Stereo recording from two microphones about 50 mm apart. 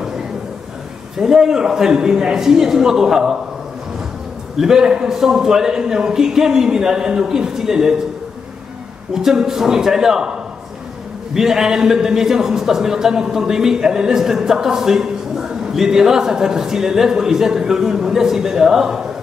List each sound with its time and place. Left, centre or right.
1.1 s a man's voice: centre
4.6 s a man's voice: centre
9.1 s a man's voice: centre
11.3 s a man's voice: centre